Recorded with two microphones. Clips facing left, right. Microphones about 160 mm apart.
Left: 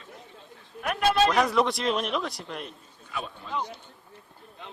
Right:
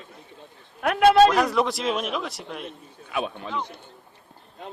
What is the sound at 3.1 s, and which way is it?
Speech, 70° right (ahead or behind).